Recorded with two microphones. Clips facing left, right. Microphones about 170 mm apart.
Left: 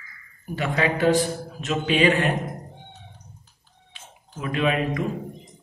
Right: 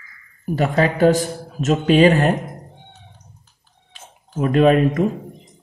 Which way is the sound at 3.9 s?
45° right (ahead or behind).